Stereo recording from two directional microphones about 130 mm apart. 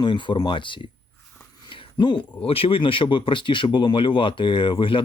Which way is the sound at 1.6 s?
40° left (ahead or behind).